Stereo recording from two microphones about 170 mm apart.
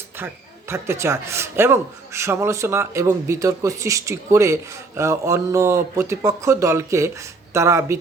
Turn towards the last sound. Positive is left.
turn(degrees=-15)  # may be behind; listen again after turning